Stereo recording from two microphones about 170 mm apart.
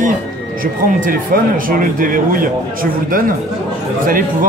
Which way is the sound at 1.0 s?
55° right (ahead or behind).